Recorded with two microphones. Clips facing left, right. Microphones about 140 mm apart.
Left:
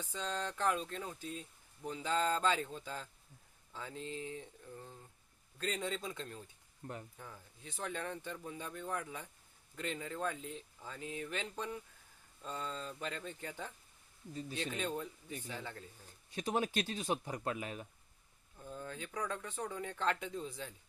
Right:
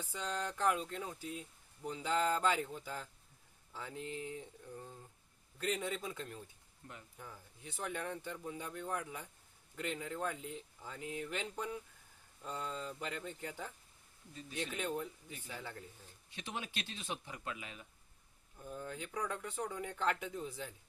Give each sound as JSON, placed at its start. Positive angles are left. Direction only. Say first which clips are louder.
{"t": 0.0, "sound": "speech", "louder": "even", "side_deg": -10}
{"t": 6.8, "sound": "speech", "louder": "left 8 dB", "side_deg": 40}
{"t": 7.2, "sound": "speech", "louder": "even", "side_deg": -10}
{"t": 16.3, "sound": "speech", "louder": "left 9 dB", "side_deg": 40}
{"t": 18.5, "sound": "speech", "louder": "right 1 dB", "side_deg": -5}